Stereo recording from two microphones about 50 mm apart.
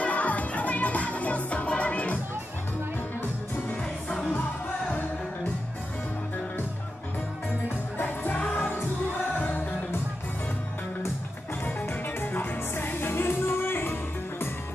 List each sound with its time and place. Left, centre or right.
0.0 s music: left
4.1 s music: centre
8.0 s music: left
12.3 s music: left